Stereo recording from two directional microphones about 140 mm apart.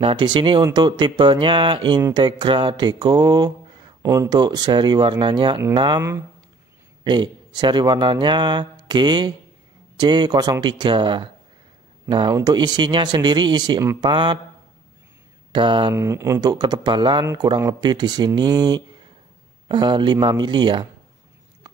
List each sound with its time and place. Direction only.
0.0 s speech: 35° right (ahead or behind)
7.1 s speech: 35° right (ahead or behind)
15.5 s speech: 35° right (ahead or behind)
15.9 s speech: 20° right (ahead or behind)